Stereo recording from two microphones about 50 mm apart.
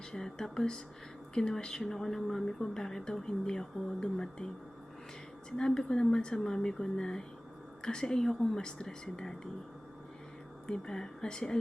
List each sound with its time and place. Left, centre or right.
0.2 s speech: centre
5.5 s speech: centre
10.7 s speech: centre